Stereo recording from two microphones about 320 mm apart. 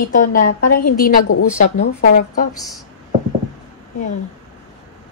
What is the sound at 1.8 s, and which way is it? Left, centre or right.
Speech, left.